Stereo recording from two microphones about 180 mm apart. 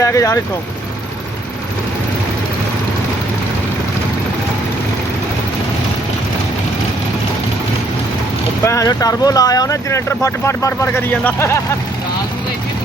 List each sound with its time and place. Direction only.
0.0 s speech: 20° left (ahead or behind)
8.6 s speech: 20° left (ahead or behind)